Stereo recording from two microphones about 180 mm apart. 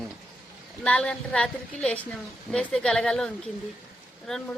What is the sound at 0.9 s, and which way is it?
A woman's voice, 5° left (ahead or behind).